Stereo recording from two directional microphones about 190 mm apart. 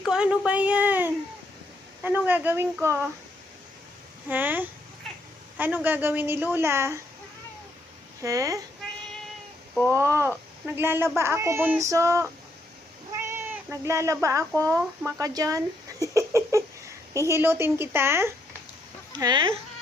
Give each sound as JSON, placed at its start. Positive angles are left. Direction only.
{"t": 0.0, "sound": "a woman's voice", "side_deg": -5}
{"t": 4.3, "sound": "a woman's voice", "side_deg": -10}
{"t": 8.2, "sound": "a woman's voice", "side_deg": -15}
{"t": 9.9, "sound": "a woman's voice", "side_deg": -15}
{"t": 13.1, "sound": "cat", "side_deg": -10}
{"t": 14.6, "sound": "a woman's voice", "side_deg": -15}
{"t": 19.2, "sound": "speech", "side_deg": -25}